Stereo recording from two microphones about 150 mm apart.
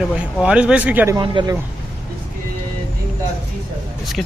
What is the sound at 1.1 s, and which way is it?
Speech, 30° right (ahead or behind).